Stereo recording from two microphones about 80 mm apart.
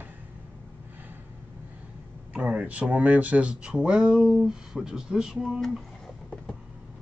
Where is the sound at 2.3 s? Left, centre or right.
Centre.